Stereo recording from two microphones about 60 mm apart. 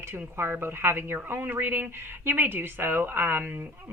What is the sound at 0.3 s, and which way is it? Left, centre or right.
Speech, right.